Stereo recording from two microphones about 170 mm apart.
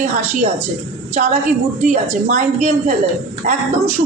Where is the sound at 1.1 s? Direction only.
45° right (ahead or behind).